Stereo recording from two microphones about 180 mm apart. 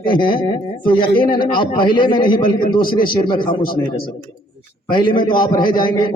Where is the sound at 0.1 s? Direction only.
25° left (ahead or behind).